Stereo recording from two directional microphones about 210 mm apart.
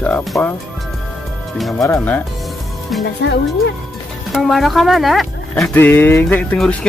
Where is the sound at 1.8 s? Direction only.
10° left (ahead or behind).